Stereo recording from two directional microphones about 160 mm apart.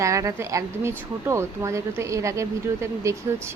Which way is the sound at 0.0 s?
20° right (ahead or behind).